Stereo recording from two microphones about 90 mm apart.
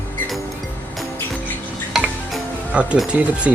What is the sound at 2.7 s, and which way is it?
Speech, 10° right (ahead or behind).